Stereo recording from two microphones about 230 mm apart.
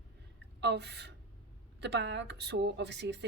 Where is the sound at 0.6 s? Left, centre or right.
Right.